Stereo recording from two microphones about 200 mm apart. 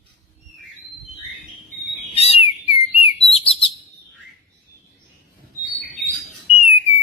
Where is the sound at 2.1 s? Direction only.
30° left (ahead or behind).